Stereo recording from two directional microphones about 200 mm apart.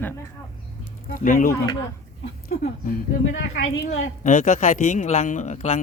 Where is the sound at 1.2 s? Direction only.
45° left (ahead or behind).